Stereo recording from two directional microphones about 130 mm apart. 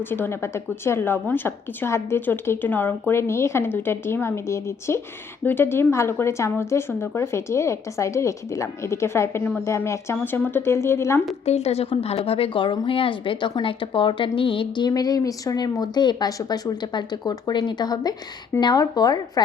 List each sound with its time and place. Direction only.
0.1 s a woman's voice: 15° left (ahead or behind)
11.4 s a woman's voice: 55° left (ahead or behind); by 19.2 s 30° left (ahead or behind)